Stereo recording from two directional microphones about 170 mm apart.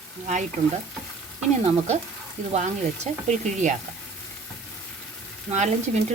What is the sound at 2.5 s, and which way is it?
Speech, 40° right (ahead or behind).